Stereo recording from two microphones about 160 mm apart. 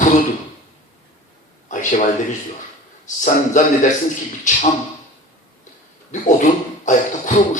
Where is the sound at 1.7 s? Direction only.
50° left (ahead or behind).